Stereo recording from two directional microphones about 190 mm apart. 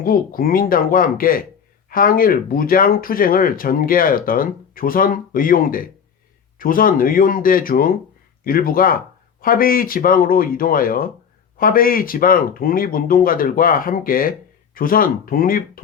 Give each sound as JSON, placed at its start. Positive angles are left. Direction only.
{"t": 0.0, "sound": "speech", "side_deg": 50}